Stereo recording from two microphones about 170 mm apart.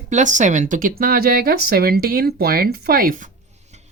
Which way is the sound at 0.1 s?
45° right (ahead or behind).